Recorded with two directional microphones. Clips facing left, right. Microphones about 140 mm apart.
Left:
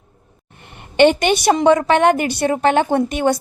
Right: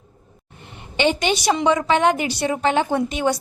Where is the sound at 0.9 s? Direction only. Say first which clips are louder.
Left 7 dB; 55° left (ahead or behind).